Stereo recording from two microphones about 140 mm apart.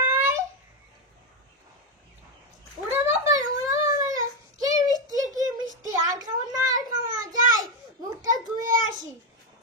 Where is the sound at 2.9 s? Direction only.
25° right (ahead or behind).